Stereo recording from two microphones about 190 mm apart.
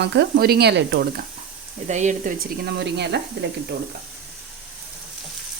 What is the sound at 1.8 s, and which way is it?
Speech, 40° right (ahead or behind).